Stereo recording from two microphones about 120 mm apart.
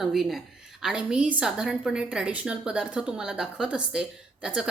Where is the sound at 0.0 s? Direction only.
Centre (ahead or behind).